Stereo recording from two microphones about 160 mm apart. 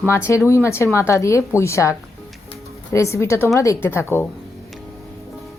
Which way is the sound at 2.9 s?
20° left (ahead or behind).